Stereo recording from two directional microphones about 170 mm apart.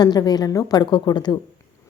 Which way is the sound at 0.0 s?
25° left (ahead or behind).